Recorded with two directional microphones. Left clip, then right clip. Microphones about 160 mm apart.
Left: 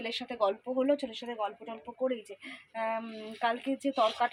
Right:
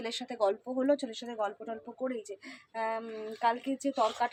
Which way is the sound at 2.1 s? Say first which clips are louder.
Left 3 dB; centre (ahead or behind).